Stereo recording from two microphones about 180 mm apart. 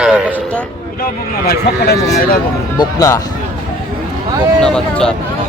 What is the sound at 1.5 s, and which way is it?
Speech, 60° left (ahead or behind).